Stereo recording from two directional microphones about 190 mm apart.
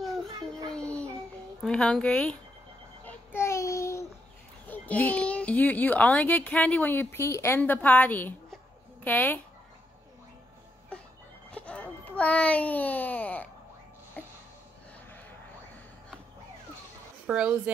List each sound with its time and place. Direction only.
0.7 s music: 5° left (ahead or behind)
1.6 s speech: 5° left (ahead or behind)
3.1 s child singing: 10° left (ahead or behind)
4.6 s a child's voice: 10° left (ahead or behind)
11.5 s a sound: 5° left (ahead or behind)
17.3 s speech: 5° right (ahead or behind)